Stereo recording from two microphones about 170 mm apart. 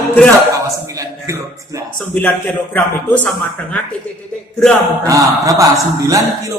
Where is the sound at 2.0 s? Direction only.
10° left (ahead or behind).